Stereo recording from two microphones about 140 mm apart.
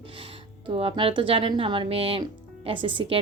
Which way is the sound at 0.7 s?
40° right (ahead or behind).